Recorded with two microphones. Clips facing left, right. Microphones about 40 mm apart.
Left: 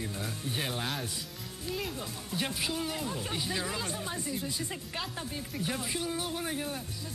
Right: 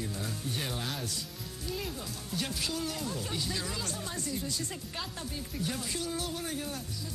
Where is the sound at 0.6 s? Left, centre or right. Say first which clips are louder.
Left 4 dB; left.